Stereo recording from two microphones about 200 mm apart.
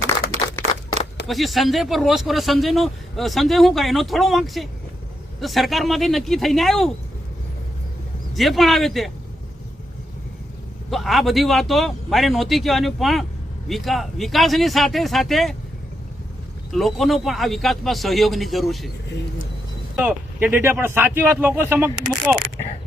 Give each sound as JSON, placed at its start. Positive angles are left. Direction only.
{"t": 0.6, "sound": "a sound", "side_deg": -35}
{"t": 1.3, "sound": "speech", "side_deg": 0}
{"t": 8.4, "sound": "speech", "side_deg": 0}
{"t": 10.9, "sound": "speech", "side_deg": 0}
{"t": 16.7, "sound": "speech", "side_deg": 0}
{"t": 20.1, "sound": "speech", "side_deg": -10}